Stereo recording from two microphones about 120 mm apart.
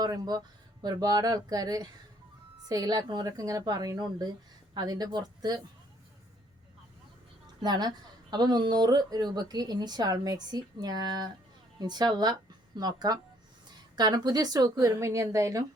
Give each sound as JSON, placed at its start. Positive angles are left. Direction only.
{"t": 0.0, "sound": "a woman's voice", "side_deg": -35}
{"t": 7.6, "sound": "a woman's voice", "side_deg": -35}